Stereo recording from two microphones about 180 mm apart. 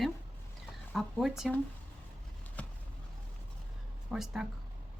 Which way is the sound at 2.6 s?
10° left (ahead or behind).